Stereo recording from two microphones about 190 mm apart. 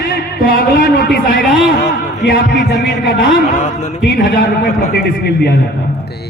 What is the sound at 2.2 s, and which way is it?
Heart sounds, 60° left (ahead or behind).